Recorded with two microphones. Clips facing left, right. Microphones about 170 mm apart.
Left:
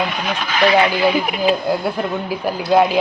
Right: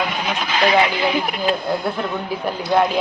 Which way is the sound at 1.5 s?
5° left (ahead or behind).